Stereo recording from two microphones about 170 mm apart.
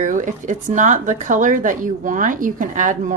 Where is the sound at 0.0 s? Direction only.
50° right (ahead or behind).